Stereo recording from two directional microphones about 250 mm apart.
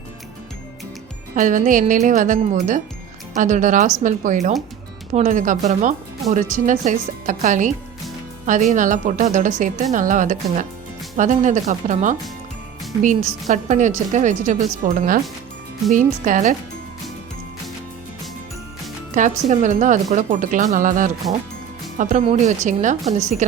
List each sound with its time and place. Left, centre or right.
1.4 s speech: right
19.1 s speech: right